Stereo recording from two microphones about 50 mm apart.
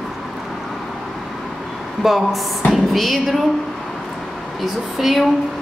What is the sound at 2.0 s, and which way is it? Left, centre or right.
Speech, centre.